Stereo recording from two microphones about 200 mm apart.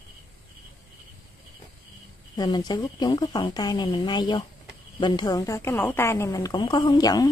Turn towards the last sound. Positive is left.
turn(degrees=20)  # may be behind; listen again after turning